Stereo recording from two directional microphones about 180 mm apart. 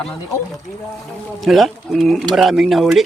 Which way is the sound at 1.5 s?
Centre (ahead or behind).